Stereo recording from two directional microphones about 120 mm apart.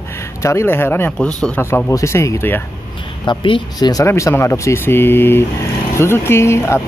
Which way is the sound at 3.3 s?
40° left (ahead or behind).